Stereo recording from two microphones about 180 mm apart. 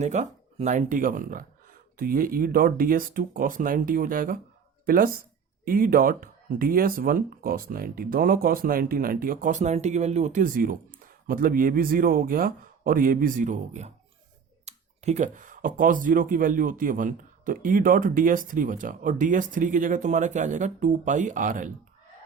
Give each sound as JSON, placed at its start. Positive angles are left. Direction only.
{"t": 0.0, "sound": "speech", "side_deg": -40}